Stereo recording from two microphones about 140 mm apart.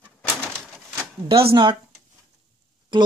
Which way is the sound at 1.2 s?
40° right (ahead or behind).